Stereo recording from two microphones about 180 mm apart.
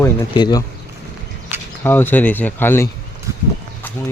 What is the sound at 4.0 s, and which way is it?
Speech, 15° left (ahead or behind).